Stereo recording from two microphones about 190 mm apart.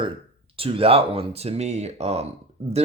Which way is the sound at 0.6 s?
30° right (ahead or behind).